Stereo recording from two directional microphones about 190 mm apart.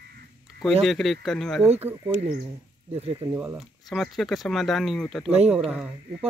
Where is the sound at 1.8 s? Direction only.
10° right (ahead or behind).